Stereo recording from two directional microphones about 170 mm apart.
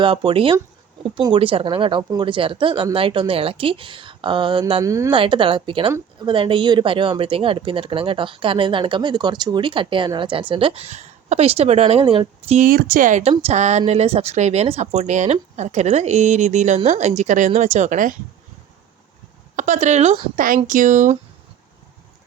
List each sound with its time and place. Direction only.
0.0 s speech: 30° right (ahead or behind)
4.8 s speech: 20° right (ahead or behind)
5.1 s speech: 30° right (ahead or behind)
12.5 s a woman's voice: 55° right (ahead or behind)
19.5 s a woman's voice: 45° right (ahead or behind)